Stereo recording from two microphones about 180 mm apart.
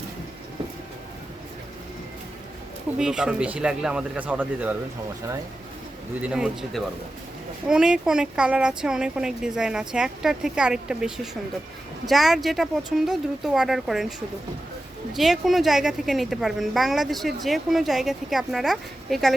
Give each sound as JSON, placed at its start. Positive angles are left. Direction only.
{"t": 3.0, "sound": "a woman's voice", "side_deg": -5}
{"t": 6.2, "sound": "a woman's voice", "side_deg": -5}
{"t": 15.1, "sound": "a woman's voice", "side_deg": 0}